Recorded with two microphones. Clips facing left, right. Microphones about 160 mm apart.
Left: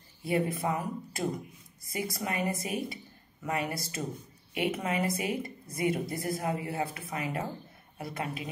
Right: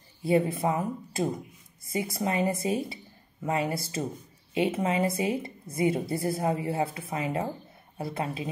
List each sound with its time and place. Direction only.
0.2 s a woman's voice: 25° right (ahead or behind)